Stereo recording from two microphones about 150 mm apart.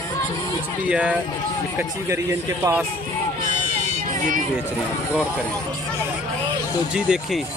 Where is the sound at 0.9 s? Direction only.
10° right (ahead or behind).